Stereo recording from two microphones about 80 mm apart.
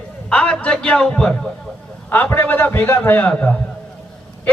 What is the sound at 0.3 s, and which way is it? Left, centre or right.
A man's voice, centre.